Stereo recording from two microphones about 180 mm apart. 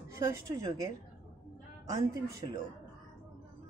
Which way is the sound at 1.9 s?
20° right (ahead or behind).